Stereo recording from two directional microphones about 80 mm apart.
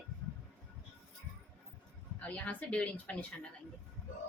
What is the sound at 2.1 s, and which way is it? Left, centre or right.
Speech, centre.